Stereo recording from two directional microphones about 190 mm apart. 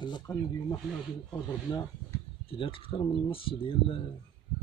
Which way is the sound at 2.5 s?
25° left (ahead or behind).